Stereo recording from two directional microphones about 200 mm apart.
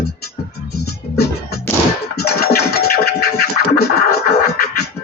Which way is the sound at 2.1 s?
50° left (ahead or behind).